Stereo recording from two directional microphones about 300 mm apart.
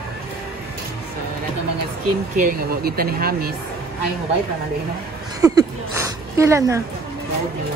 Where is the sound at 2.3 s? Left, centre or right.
Right.